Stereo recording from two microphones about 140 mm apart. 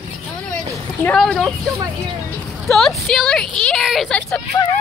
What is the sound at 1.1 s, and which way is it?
Speech, centre (ahead or behind).